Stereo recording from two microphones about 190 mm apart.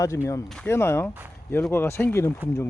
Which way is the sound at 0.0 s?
15° left (ahead or behind).